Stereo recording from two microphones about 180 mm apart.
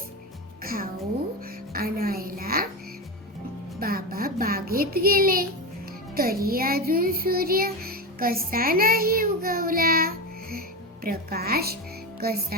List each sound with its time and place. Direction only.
0.6 s music: 55° right (ahead or behind)
3.8 s music: 55° right (ahead or behind)
6.1 s child singing: 55° right (ahead or behind)
11.0 s a woman's voice: 55° right (ahead or behind)